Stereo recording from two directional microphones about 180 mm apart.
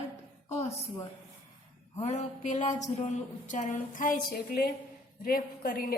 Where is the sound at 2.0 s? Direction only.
40° left (ahead or behind).